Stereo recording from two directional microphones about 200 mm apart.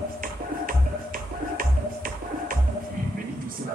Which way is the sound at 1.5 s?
45° right (ahead or behind).